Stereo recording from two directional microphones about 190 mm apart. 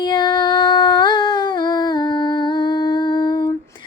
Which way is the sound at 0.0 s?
20° left (ahead or behind).